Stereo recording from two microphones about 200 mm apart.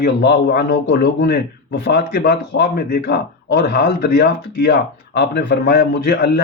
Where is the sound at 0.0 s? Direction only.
55° left (ahead or behind).